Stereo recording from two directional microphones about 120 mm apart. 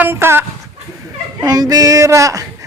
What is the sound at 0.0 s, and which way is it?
Speech, 20° right (ahead or behind).